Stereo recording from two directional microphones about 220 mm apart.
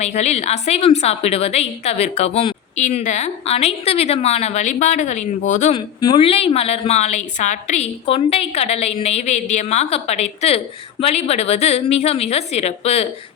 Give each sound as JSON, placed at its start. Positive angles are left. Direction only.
{"t": 0.0, "sound": "a woman's voice", "side_deg": 30}
{"t": 5.7, "sound": "a woman's voice", "side_deg": 20}